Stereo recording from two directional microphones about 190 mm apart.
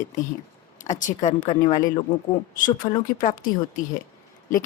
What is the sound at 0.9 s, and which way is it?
Speech, 45° left (ahead or behind).